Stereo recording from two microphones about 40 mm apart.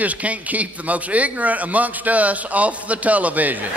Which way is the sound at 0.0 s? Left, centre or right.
Right.